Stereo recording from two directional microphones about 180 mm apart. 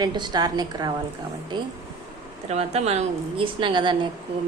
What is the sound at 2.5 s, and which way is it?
A woman's voice, 35° right (ahead or behind).